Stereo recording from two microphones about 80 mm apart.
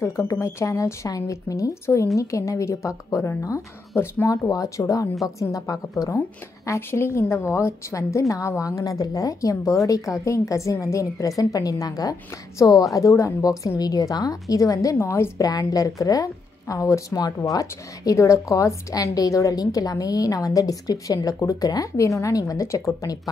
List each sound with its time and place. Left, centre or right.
0.0 s a woman's voice: left
3.9 s speech: left
4.3 s a woman's voice: left
15.0 s a woman's voice: left
15.4 s speech: left